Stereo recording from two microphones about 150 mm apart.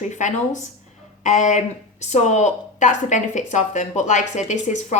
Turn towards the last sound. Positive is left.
turn(degrees=55)  # may be behind; listen again after turning